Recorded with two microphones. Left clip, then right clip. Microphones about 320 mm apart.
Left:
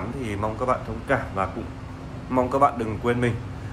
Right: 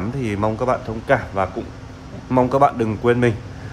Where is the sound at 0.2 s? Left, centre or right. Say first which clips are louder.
Right 6 dB; right.